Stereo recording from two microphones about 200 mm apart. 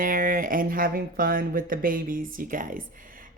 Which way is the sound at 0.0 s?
45° right (ahead or behind).